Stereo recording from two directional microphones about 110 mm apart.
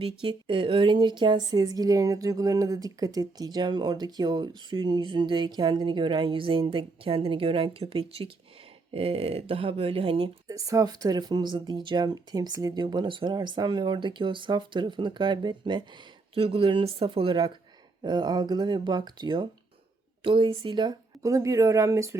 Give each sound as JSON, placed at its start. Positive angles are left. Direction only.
{"t": 0.0, "sound": "speech", "side_deg": -50}
{"t": 10.5, "sound": "speech", "side_deg": -30}
{"t": 16.3, "sound": "speech", "side_deg": -55}
{"t": 18.0, "sound": "speech", "side_deg": -40}
{"t": 21.2, "sound": "speech", "side_deg": -30}